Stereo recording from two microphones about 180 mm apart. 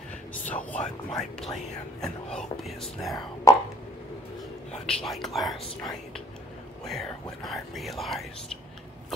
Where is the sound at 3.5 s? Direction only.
20° left (ahead or behind).